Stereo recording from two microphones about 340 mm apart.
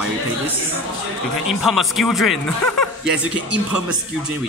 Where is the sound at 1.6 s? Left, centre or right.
Centre.